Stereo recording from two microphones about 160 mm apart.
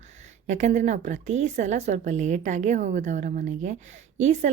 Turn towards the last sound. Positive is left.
turn(degrees=-45)  # may be behind; listen again after turning